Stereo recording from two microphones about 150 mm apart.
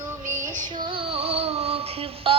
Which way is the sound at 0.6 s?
30° right (ahead or behind).